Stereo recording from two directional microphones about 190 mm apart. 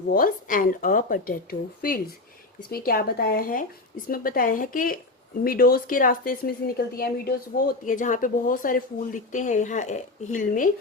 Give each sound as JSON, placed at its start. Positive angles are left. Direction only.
{"t": 0.1, "sound": "a woman's voice", "side_deg": 45}